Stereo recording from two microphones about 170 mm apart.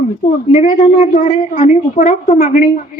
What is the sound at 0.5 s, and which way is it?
A woman's voice, 45° left (ahead or behind).